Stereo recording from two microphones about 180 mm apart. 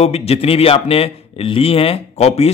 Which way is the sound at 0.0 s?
35° left (ahead or behind).